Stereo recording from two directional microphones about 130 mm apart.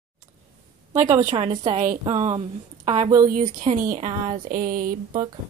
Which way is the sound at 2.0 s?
50° right (ahead or behind).